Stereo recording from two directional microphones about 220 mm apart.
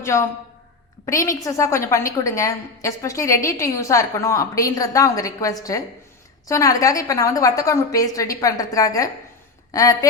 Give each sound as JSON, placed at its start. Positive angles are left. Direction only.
{"t": 0.0, "sound": "a woman's voice", "side_deg": 15}